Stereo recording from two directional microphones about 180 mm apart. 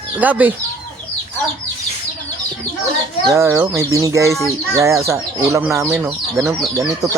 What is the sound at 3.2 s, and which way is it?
Speech, 15° right (ahead or behind).